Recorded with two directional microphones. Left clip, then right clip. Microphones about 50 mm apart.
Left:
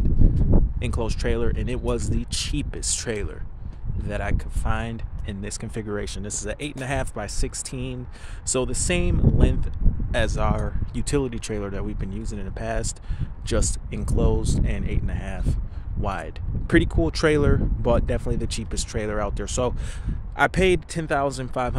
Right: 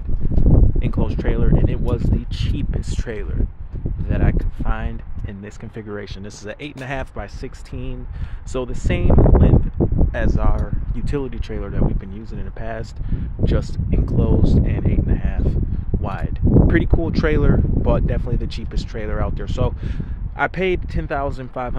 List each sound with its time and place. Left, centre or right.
0.7 s speech: left
8.5 s speech: left